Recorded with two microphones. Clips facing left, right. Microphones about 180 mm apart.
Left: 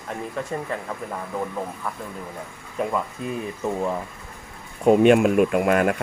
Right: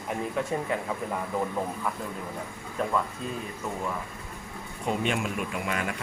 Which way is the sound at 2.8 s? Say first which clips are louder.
Left 4 dB; 10° left (ahead or behind).